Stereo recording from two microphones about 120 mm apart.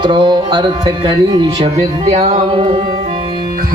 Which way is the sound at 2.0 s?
70° right (ahead or behind).